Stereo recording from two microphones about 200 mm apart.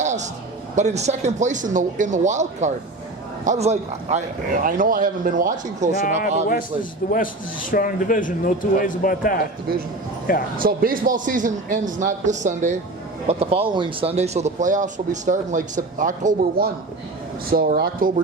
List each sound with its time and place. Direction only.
0.0 s a sound: 35° right (ahead or behind)
0.8 s speech: 35° right (ahead or behind)
6.0 s a man's voice: 45° left (ahead or behind)
10.6 s speech: 45° right (ahead or behind)